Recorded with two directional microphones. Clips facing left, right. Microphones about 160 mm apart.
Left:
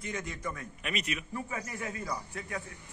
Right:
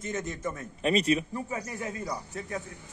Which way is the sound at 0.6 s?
30° right (ahead or behind).